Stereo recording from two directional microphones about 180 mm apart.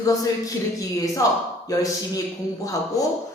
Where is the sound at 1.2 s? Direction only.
15° left (ahead or behind).